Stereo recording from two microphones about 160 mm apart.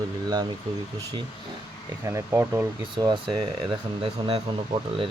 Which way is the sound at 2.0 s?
15° right (ahead or behind).